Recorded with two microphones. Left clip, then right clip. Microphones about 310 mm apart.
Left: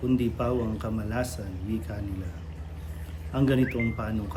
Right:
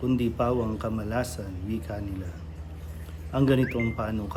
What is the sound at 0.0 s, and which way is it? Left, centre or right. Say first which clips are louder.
Speech: right 1 dB; centre.